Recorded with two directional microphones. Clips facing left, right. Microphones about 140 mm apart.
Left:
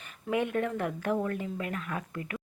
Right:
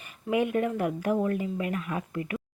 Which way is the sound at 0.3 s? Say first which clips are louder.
Right 3 dB; 10° right (ahead or behind).